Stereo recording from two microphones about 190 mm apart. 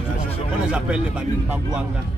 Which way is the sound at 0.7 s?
5° right (ahead or behind).